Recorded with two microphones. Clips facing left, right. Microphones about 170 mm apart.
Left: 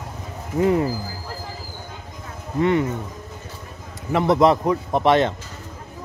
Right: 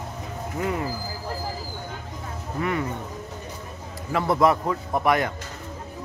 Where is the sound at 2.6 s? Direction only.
25° left (ahead or behind).